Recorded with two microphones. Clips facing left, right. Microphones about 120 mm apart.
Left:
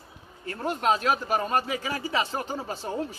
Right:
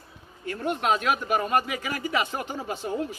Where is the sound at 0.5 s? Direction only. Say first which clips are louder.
Even; 35° left (ahead or behind).